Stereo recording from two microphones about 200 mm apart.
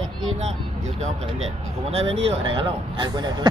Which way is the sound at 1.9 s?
30° right (ahead or behind).